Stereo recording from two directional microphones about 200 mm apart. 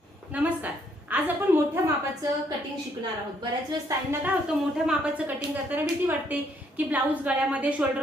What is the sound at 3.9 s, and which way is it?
Speech, 15° right (ahead or behind).